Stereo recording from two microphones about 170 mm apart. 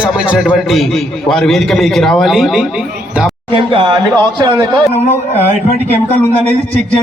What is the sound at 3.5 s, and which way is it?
Speech, 30° right (ahead or behind).